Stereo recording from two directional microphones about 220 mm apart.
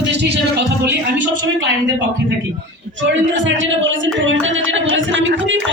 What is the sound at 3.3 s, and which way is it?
Music, 55° right (ahead or behind).